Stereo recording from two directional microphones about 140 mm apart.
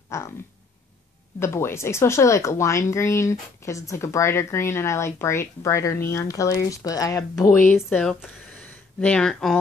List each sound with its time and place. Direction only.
0.1 s speech: 20° left (ahead or behind)
1.4 s speech: 20° left (ahead or behind)
8.0 s speech: 5° left (ahead or behind)